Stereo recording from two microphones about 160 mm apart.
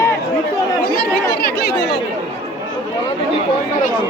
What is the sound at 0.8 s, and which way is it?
Speech, 80° left.